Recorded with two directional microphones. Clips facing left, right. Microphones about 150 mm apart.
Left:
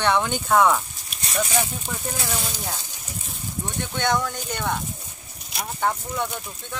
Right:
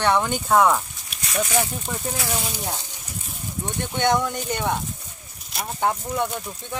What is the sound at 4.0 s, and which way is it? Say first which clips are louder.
Speech: right 3 dB; 20° right (ahead or behind).